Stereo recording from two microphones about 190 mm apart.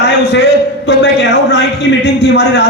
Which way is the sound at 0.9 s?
65° left (ahead or behind).